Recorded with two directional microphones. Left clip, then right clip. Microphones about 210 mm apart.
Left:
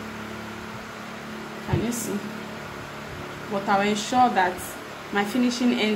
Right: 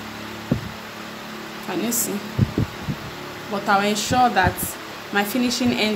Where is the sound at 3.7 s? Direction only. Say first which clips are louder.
Right 4 dB; 25° right (ahead or behind).